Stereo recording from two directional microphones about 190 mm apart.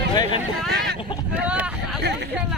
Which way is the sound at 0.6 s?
60° right (ahead or behind).